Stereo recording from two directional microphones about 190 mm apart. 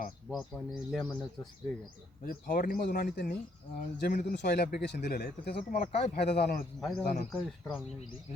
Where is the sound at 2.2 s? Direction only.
50° left (ahead or behind).